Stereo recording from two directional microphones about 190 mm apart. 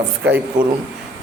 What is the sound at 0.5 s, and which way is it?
Speech, 45° right (ahead or behind).